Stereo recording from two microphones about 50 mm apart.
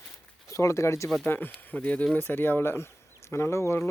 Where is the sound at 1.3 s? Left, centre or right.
Left.